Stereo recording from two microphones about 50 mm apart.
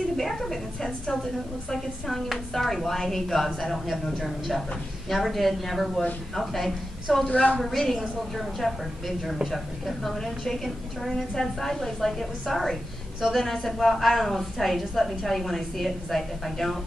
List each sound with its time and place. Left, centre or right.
0.2 s a woman's voice: centre
7.2 s a woman's voice: left
7.5 s a woman's voice: centre